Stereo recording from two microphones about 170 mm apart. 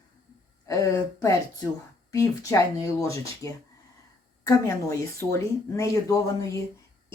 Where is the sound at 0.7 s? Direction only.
20° left (ahead or behind).